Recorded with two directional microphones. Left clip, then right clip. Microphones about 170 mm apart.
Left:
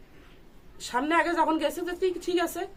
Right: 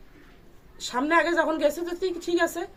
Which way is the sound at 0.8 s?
15° left (ahead or behind).